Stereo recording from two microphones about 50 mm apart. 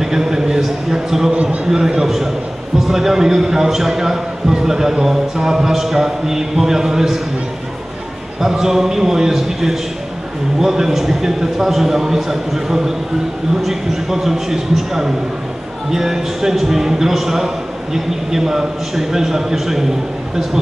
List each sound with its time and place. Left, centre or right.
0.0 s a man's voice: centre
1.3 s a man's voice: right
1.7 s a man's voice: centre
8.4 s a man's voice: centre